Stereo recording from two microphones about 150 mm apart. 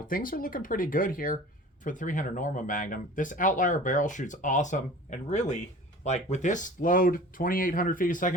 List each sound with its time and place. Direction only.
0.1 s speech: 65° left (ahead or behind)